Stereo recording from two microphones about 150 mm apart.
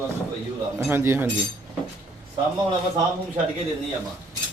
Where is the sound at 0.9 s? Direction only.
15° right (ahead or behind).